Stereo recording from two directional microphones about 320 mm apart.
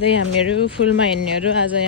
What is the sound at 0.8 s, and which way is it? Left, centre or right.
Speech, left.